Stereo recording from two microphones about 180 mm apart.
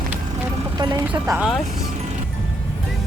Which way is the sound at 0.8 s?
25° right (ahead or behind).